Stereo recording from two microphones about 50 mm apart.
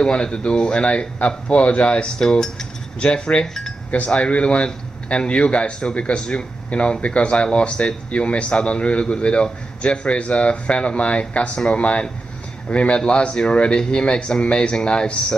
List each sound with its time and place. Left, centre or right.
0.0 s a man's voice: centre